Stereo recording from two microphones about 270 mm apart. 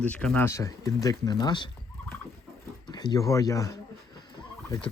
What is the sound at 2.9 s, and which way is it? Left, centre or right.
Speech, centre.